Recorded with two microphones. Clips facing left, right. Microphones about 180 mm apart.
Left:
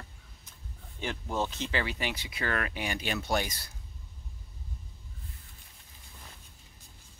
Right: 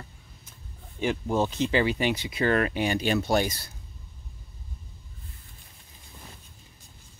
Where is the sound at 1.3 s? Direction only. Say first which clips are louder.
Right 7 dB; 10° right (ahead or behind); by 3.7 s 30° right (ahead or behind).